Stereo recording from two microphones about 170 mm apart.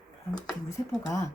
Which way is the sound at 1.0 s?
15° left (ahead or behind).